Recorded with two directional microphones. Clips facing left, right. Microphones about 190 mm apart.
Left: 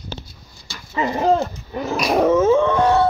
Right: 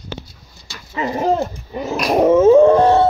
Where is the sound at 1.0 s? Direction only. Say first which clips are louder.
Even; 5° right (ahead or behind).